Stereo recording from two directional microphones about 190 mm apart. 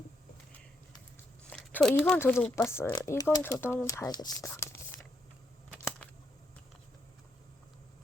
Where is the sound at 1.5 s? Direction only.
5° left (ahead or behind).